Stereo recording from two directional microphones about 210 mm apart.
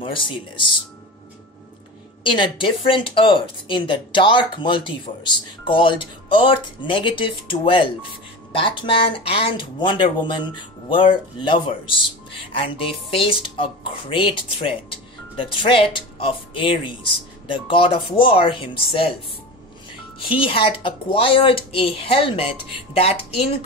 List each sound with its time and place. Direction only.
0.0 s speech: 25° left (ahead or behind)
2.2 s speech: 25° left (ahead or behind)
20.2 s speech: 25° left (ahead or behind)